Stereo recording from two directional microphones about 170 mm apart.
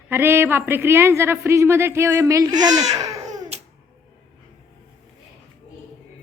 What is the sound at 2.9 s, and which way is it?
Babbling, 20° right (ahead or behind).